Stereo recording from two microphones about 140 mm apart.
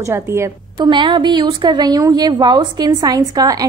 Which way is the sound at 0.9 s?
35° right (ahead or behind).